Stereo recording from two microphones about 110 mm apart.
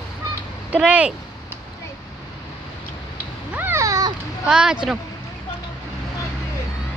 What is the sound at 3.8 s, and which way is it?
Children playing, 30° right (ahead or behind).